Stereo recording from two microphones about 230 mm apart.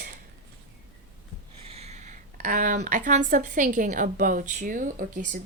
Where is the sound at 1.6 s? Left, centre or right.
Right.